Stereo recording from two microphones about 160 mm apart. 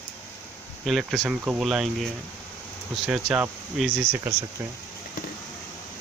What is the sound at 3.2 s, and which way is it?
Speech, 15° right (ahead or behind).